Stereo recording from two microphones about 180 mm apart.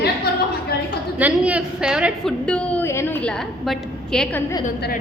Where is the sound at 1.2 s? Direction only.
10° right (ahead or behind).